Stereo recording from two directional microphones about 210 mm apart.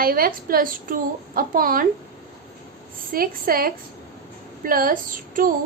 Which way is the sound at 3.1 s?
45° right (ahead or behind).